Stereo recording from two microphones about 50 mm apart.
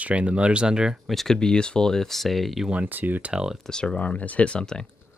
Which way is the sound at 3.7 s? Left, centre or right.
Centre.